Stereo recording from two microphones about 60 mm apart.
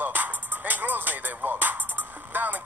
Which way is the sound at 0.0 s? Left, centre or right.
Right.